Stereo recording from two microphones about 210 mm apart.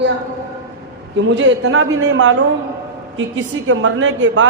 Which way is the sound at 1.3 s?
65° right (ahead or behind).